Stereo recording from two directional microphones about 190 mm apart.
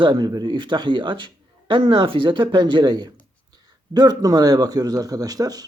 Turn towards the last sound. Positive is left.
turn(degrees=-20)  # may be behind; listen again after turning